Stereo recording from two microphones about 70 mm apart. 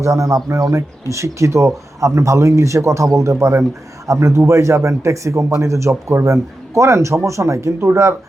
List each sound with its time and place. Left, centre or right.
0.0 s a man's voice: right